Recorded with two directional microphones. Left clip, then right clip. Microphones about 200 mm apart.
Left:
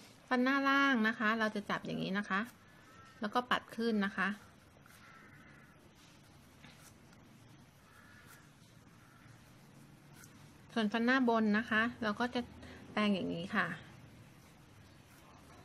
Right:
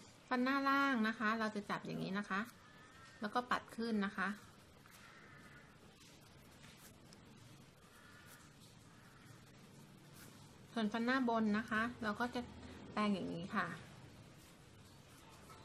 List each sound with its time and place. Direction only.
0.3 s speech: 35° left (ahead or behind)
10.7 s speech: 35° left (ahead or behind)